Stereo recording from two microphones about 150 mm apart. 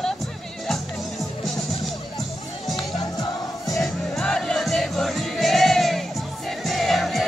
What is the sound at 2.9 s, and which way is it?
Music, 25° left (ahead or behind).